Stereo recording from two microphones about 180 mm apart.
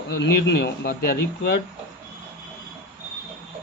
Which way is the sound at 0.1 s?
70° left (ahead or behind).